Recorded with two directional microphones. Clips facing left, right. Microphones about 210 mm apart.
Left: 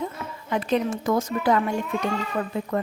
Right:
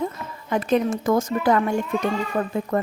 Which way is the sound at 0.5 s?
45° right (ahead or behind).